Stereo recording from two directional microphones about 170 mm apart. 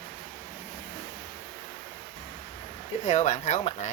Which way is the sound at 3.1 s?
45° left (ahead or behind).